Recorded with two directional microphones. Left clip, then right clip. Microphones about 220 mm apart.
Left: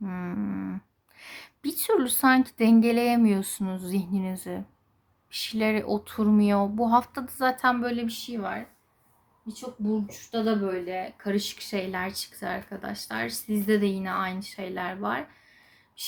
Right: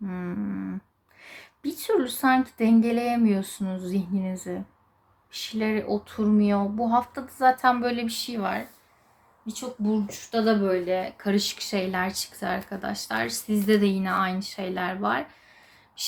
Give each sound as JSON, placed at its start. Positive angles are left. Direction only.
{"t": 0.0, "sound": "speech", "side_deg": 15}